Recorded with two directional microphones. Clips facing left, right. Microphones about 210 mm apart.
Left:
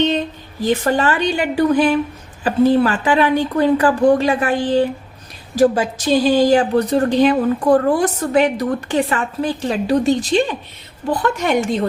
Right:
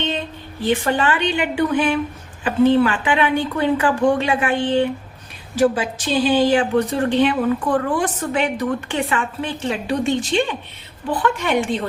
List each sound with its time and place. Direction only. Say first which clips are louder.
0.6 s a woman's voice: left 2 dB; 40° left (ahead or behind)